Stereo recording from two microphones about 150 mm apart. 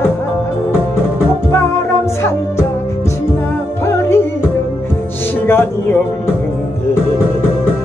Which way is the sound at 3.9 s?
15° left (ahead or behind).